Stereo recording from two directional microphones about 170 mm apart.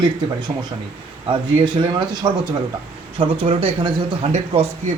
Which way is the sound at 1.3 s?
30° right (ahead or behind).